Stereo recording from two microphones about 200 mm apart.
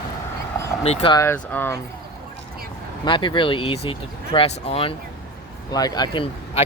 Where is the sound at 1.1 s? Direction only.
10° left (ahead or behind).